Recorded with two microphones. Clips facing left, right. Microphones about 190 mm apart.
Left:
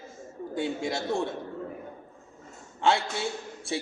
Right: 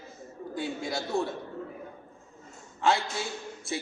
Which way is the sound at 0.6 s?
25° left (ahead or behind).